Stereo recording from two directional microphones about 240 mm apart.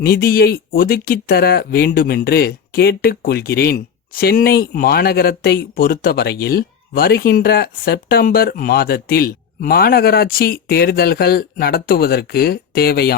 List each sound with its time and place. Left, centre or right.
0.0 s speech: left